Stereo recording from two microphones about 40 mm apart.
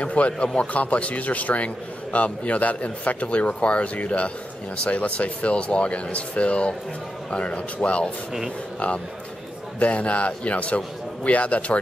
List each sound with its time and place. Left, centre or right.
0.0 s a man's voice: left